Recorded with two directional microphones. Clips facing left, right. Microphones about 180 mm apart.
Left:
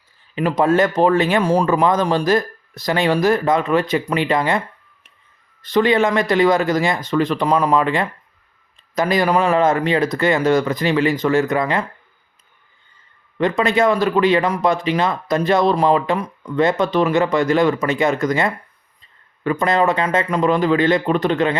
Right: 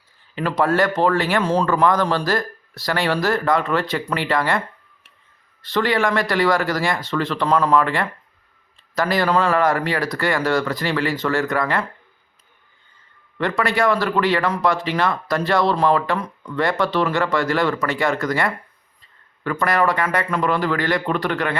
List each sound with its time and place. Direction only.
0.3 s speech: 15° left (ahead or behind)
5.6 s speech: 20° left (ahead or behind)
13.4 s speech: 20° left (ahead or behind)